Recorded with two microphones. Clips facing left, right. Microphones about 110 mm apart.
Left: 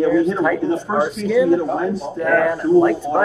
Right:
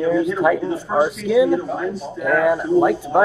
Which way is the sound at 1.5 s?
40° left (ahead or behind).